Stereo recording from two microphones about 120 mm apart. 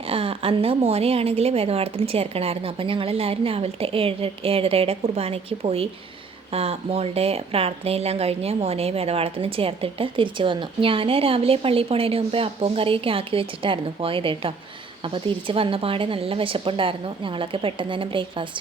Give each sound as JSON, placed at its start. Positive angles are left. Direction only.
{"t": 0.0, "sound": "a woman's voice", "side_deg": -50}